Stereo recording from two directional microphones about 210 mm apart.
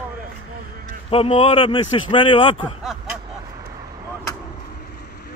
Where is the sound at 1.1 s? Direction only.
30° left (ahead or behind).